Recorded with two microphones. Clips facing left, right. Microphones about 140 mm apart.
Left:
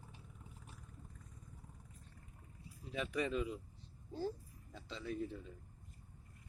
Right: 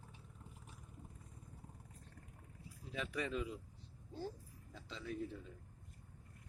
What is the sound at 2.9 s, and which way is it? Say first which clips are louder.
Speech: left 3 dB; 15° left (ahead or behind).